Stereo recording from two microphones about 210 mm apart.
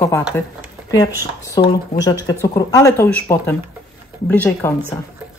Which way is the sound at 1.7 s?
20° left (ahead or behind).